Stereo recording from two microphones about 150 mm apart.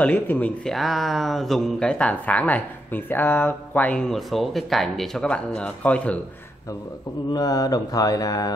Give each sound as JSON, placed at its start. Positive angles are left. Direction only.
{"t": 0.0, "sound": "speech", "side_deg": 10}
{"t": 4.1, "sound": "speech", "side_deg": 0}
{"t": 7.3, "sound": "mantra", "side_deg": 25}